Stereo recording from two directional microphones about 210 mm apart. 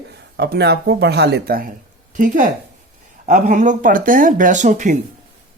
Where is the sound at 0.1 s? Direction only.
50° right (ahead or behind); by 4.9 s 35° right (ahead or behind).